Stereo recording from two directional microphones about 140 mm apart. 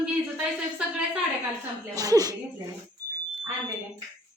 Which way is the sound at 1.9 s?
25° right (ahead or behind).